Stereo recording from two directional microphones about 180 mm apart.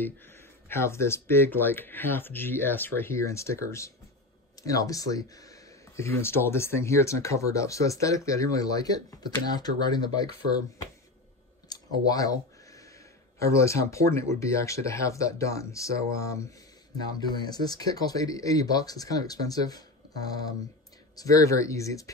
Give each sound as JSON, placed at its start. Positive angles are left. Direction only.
{"t": 0.0, "sound": "speech", "side_deg": 10}
{"t": 11.7, "sound": "a sound", "side_deg": 20}
{"t": 13.4, "sound": "speech", "side_deg": 15}
{"t": 17.2, "sound": "speech", "side_deg": 20}